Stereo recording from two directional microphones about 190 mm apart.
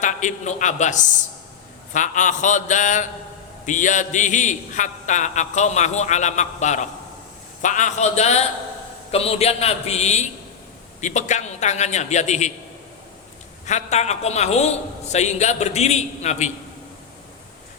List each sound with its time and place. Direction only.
0.0 s a man's voice: 40° left (ahead or behind)
13.7 s a man's voice: 35° left (ahead or behind)